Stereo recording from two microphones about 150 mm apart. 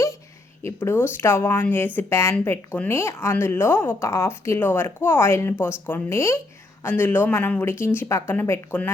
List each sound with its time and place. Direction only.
0.6 s speech: 15° left (ahead or behind)